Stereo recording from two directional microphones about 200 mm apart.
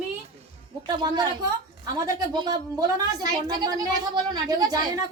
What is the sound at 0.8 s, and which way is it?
Speech, 20° right (ahead or behind).